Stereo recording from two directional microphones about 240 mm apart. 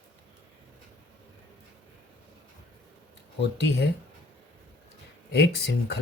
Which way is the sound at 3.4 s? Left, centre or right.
Left.